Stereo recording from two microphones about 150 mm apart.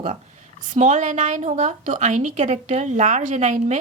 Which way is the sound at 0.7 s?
55° right (ahead or behind).